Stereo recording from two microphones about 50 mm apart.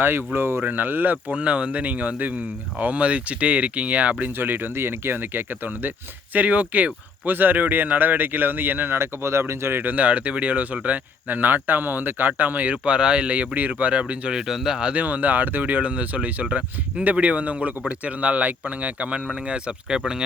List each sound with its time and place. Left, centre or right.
0.0 s speech: right
1.3 s a man's voice: right
4.3 s speech: right
9.8 s a man's voice: right
12.7 s a man's voice: right
14.0 s a man's voice: centre
14.4 s speech: centre
14.9 s a man's voice: right